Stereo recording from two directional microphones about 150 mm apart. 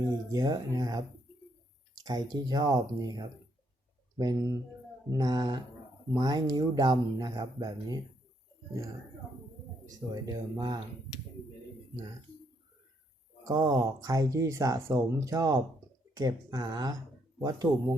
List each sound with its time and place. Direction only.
0.3 s speech: 25° right (ahead or behind)
2.0 s speech: 25° right (ahead or behind)
9.8 s speech: 25° right (ahead or behind)
13.4 s speech: 25° right (ahead or behind)